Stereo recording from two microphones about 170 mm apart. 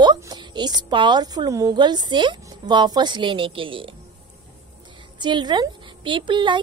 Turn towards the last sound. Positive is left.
turn(degrees=-30)  # may be behind; listen again after turning